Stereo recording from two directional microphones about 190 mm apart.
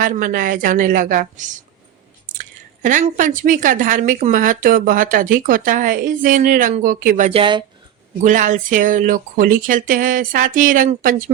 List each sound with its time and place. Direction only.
0.0 s speech: 45° right (ahead or behind); by 7.6 s 25° right (ahead or behind)
8.2 s speech: 40° right (ahead or behind)